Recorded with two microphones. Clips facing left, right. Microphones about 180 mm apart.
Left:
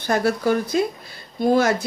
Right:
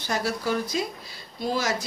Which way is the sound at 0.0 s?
55° left (ahead or behind).